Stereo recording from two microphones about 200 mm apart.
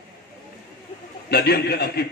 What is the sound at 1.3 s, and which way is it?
Speech, 50° left (ahead or behind).